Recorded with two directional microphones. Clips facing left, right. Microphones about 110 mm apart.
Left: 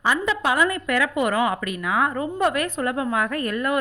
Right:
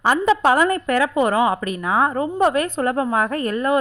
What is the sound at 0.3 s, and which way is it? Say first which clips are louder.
A woman's voice: right 6 dB; 40° right (ahead or behind).